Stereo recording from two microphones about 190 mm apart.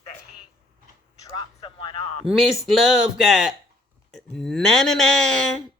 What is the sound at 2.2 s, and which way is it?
Speech, centre (ahead or behind).